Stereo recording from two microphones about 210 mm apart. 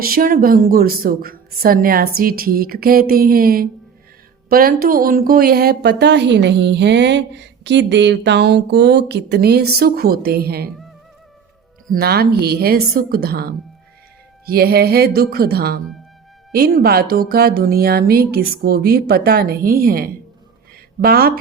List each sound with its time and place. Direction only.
0.0 s speech: 45° right (ahead or behind)
11.9 s speech: 45° right (ahead or behind)